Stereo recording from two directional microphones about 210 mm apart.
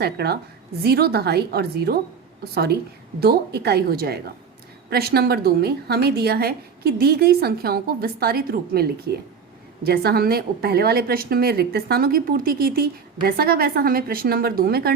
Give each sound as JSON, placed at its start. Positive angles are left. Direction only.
{"t": 0.0, "sound": "a woman's voice", "side_deg": -50}